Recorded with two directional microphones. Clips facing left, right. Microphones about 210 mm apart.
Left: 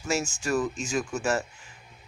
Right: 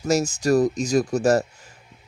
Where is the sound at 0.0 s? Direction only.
40° right (ahead or behind).